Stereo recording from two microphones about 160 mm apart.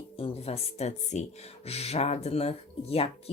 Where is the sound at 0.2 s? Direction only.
40° left (ahead or behind).